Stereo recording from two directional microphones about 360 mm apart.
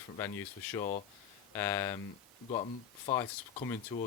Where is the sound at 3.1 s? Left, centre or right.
Centre.